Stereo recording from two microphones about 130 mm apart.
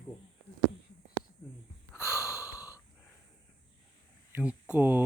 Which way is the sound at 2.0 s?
5° right (ahead or behind).